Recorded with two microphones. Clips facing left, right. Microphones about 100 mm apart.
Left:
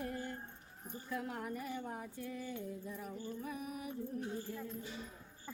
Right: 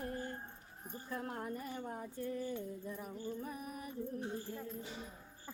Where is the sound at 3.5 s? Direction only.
40° right (ahead or behind).